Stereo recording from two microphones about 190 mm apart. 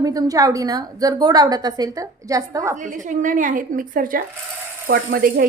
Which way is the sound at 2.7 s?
40° right (ahead or behind).